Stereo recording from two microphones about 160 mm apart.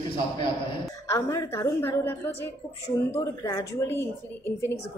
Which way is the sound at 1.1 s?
20° left (ahead or behind).